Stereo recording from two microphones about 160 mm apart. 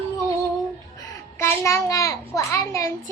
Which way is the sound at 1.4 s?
15° left (ahead or behind).